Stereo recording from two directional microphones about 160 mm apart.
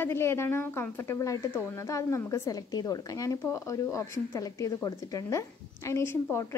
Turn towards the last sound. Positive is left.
turn(degrees=15)  # may be behind; listen again after turning